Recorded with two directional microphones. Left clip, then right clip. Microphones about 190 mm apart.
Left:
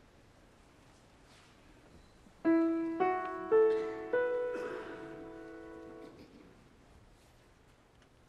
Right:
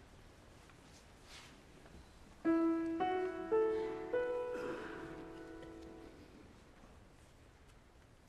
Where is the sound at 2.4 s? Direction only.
30° left (ahead or behind).